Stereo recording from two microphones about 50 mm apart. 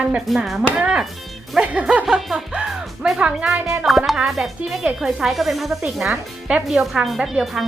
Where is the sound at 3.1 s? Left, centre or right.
Right.